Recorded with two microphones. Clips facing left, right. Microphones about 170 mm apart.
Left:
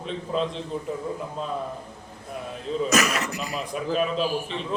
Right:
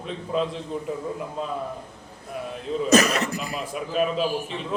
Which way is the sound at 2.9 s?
30° right (ahead or behind).